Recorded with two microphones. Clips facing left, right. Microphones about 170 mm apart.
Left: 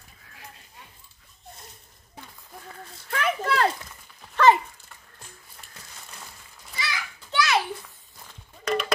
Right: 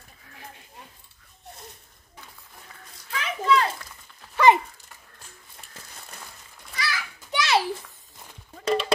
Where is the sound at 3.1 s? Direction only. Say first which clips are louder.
Right 2 dB; 60° left (ahead or behind).